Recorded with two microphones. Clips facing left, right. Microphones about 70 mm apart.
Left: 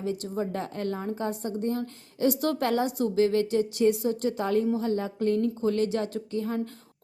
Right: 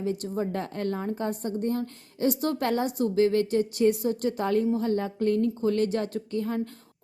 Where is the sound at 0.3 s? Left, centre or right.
Right.